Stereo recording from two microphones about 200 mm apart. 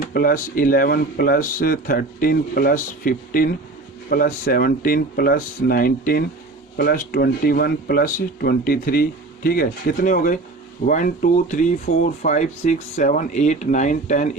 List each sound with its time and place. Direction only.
0.0 s speech: 50° left (ahead or behind)